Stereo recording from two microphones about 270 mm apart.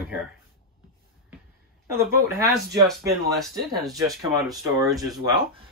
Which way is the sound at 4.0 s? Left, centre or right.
Centre.